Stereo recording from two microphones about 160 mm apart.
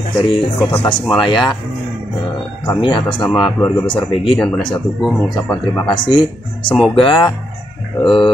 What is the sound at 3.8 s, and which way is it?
Speech, 30° left (ahead or behind).